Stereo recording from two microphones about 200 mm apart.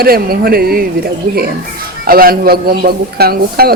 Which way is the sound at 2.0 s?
45° right (ahead or behind).